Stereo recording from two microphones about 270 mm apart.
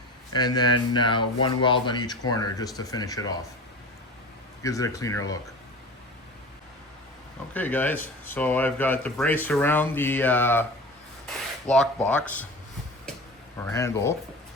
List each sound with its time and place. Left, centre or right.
0.3 s speech: centre
4.6 s speech: centre
7.5 s speech: centre
11.7 s speech: centre
13.7 s speech: centre